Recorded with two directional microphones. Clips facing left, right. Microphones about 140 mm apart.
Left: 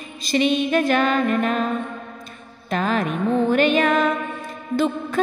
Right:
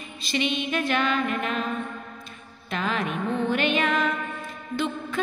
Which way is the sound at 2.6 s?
40° left (ahead or behind).